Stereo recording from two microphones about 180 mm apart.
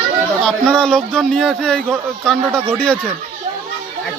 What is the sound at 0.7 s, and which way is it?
Speech, 5° left (ahead or behind).